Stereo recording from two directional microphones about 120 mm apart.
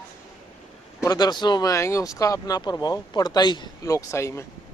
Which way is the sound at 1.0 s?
35° left (ahead or behind).